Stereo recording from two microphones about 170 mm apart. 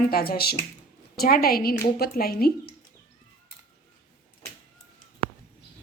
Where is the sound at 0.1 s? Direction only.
60° left (ahead or behind).